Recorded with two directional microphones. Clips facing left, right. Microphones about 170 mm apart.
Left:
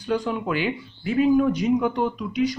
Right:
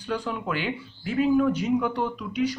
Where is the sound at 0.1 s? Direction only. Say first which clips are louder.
Left 4 dB; 15° left (ahead or behind).